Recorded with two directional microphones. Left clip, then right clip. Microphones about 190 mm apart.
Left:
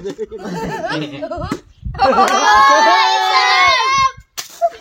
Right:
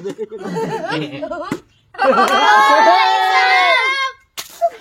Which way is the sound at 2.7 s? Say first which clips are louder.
Even; 45° left (ahead or behind).